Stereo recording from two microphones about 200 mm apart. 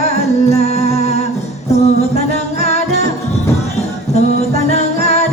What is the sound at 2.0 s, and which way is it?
Music, 35° left (ahead or behind).